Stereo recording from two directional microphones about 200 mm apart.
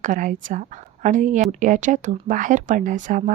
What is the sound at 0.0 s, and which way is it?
A woman's voice, 40° right (ahead or behind).